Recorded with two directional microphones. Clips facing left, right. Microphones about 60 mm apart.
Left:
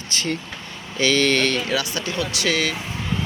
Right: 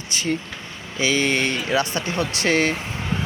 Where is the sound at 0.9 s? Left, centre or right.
Centre.